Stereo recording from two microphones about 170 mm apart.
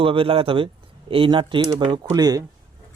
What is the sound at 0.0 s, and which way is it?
Speech, 30° right (ahead or behind).